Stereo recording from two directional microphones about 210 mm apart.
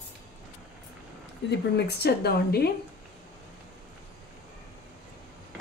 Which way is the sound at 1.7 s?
50° left (ahead or behind).